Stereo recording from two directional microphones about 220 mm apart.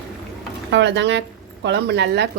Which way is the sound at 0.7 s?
55° right (ahead or behind).